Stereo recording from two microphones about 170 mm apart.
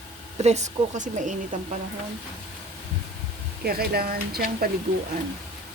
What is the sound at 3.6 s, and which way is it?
Speech, 65° right (ahead or behind).